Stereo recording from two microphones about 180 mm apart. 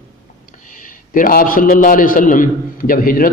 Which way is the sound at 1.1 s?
50° left (ahead or behind).